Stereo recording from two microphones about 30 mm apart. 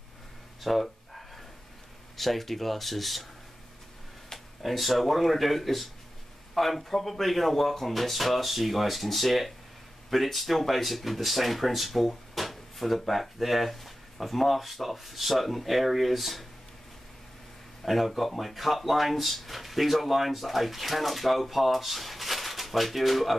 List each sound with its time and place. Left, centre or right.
0.6 s a sound: centre
2.1 s speech: centre
4.6 s speech: centre
17.8 s speech: centre